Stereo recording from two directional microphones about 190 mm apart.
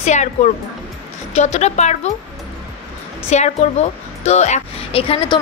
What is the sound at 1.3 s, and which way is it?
Speech, 35° left (ahead or behind).